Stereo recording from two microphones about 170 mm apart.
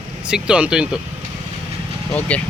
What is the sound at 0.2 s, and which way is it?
Speech, 5° right (ahead or behind).